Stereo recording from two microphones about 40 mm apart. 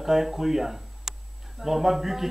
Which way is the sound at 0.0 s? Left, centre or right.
Centre.